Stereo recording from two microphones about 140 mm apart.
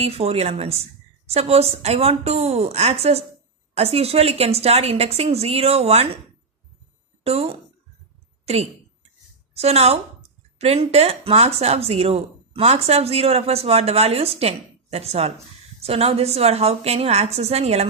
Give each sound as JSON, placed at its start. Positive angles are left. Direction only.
{"t": 0.0, "sound": "speech", "side_deg": -45}
{"t": 7.2, "sound": "speech", "side_deg": -45}